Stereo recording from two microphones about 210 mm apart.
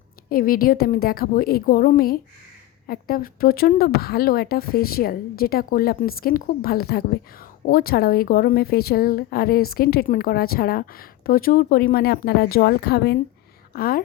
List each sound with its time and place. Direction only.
0.3 s a woman's voice: 45° left (ahead or behind)